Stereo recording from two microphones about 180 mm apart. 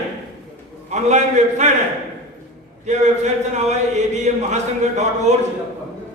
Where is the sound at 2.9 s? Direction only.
40° right (ahead or behind).